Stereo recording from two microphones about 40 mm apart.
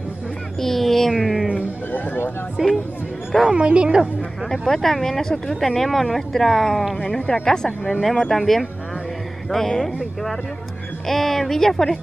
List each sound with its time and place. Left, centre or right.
0.6 s a sound: centre
1.1 s music: centre
1.9 s a sound: left
2.6 s speech: centre
3.4 s speech: right
4.5 s speech: centre
7.4 s speech: centre
8.0 s speech: centre
11.1 s speech: centre